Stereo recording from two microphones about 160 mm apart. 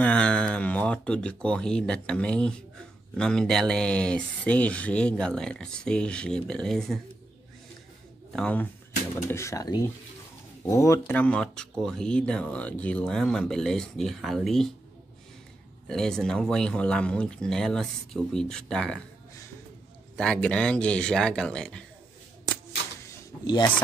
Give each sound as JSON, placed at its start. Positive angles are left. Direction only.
{"t": 0.0, "sound": "speech", "side_deg": 5}
{"t": 8.3, "sound": "speech", "side_deg": 5}
{"t": 9.3, "sound": "speech", "side_deg": 20}
{"t": 15.9, "sound": "speech", "side_deg": 5}
{"t": 20.2, "sound": "speech", "side_deg": 5}
{"t": 23.4, "sound": "speech", "side_deg": 25}